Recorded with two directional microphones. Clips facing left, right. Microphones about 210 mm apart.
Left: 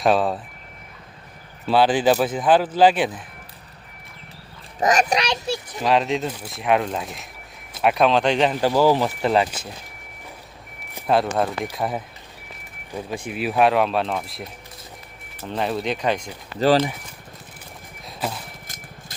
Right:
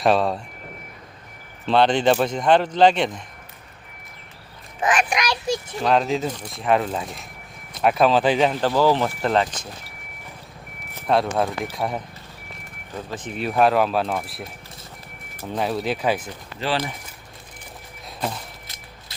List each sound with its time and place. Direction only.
0.0 s speech: centre (ahead or behind)
1.6 s speech: 5° left (ahead or behind)
4.8 s a child's voice: 40° left (ahead or behind)
5.8 s speech: centre (ahead or behind)
8.6 s speech: 10° left (ahead or behind)
11.0 s speech: centre (ahead or behind)
16.6 s a child's voice: 40° left (ahead or behind)